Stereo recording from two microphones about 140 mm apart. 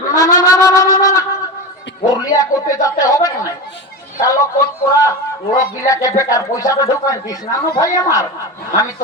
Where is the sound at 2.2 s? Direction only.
25° left (ahead or behind).